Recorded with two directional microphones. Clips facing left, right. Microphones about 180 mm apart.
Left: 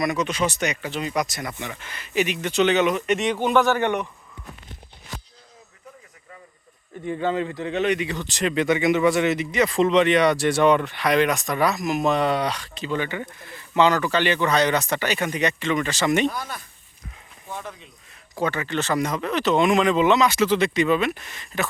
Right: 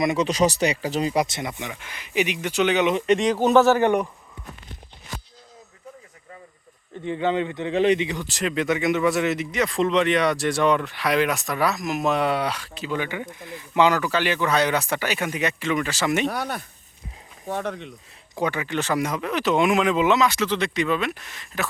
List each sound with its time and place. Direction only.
0.0 s a man's voice: 25° right (ahead or behind)
0.3 s speech: 35° right (ahead or behind); by 2.8 s 10° right (ahead or behind)
2.8 s speech: 30° right (ahead or behind)
7.0 s a man's voice: 20° right (ahead or behind)
8.0 s speech: 15° right (ahead or behind)
8.3 s speech: centre (ahead or behind)
16.3 s speech: 65° right (ahead or behind)
18.3 s speech: 15° right (ahead or behind)